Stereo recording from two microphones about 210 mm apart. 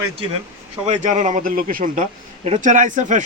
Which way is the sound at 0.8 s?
35° right (ahead or behind).